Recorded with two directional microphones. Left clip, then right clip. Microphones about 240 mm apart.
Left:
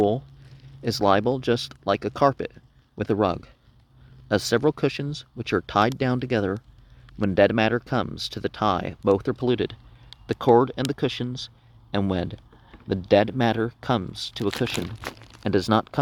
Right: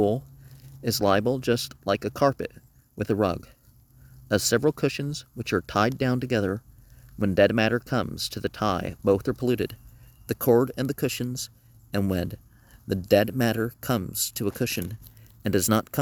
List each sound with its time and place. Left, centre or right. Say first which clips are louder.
0.8 s speech: left 2 dB; right